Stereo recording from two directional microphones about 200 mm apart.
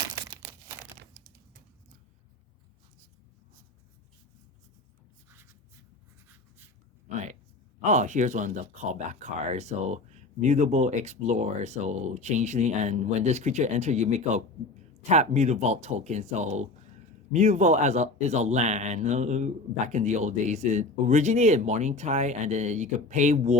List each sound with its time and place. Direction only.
7.8 s speech: 35° right (ahead or behind)